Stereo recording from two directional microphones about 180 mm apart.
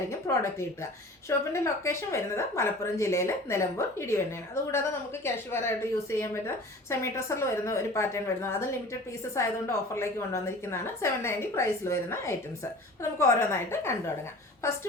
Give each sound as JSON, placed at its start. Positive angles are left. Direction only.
{"t": 0.3, "sound": "a woman's voice", "side_deg": 15}
{"t": 5.2, "sound": "a woman's voice", "side_deg": 15}